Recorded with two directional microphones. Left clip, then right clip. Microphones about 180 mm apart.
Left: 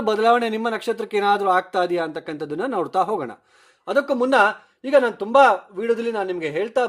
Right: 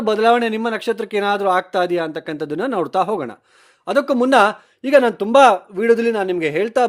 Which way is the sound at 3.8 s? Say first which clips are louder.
Right 3 dB; 40° right (ahead or behind).